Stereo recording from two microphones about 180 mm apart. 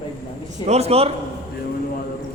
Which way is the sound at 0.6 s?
35° right (ahead or behind).